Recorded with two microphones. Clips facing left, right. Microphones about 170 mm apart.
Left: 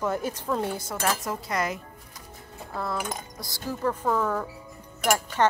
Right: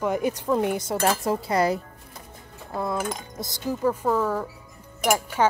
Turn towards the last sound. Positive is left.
turn(degrees=-10)  # may be behind; listen again after turning